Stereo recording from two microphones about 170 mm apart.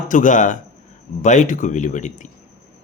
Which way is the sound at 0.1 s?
50° left (ahead or behind).